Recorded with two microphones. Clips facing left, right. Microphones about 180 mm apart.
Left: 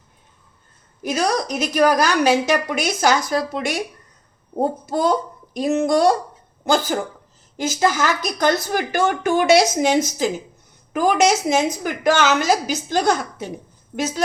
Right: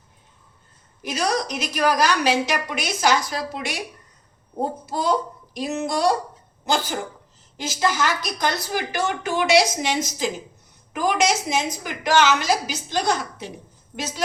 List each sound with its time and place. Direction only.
1.0 s speech: 45° left (ahead or behind)
4.9 s speech: 50° left (ahead or behind)
7.5 s speech: 45° left (ahead or behind)